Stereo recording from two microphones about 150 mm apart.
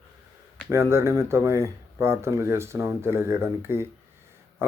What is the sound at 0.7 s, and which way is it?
Speech, 20° right (ahead or behind).